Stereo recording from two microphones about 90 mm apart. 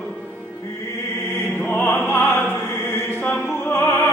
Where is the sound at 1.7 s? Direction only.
20° left (ahead or behind).